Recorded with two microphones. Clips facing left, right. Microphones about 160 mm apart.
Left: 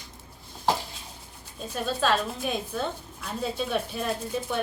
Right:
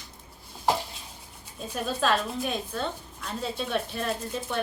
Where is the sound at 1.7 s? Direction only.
Centre (ahead or behind).